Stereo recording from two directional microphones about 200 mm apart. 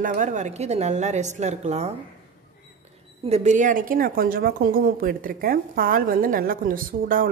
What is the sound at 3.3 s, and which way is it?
Speech, 35° right (ahead or behind).